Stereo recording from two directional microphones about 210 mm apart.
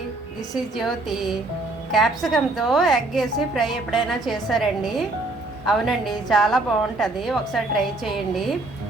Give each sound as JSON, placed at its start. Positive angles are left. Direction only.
{"t": 0.5, "sound": "a woman's voice", "side_deg": 0}